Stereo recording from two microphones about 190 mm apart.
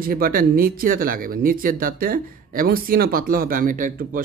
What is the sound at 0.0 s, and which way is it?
A woman's voice, 50° right (ahead or behind).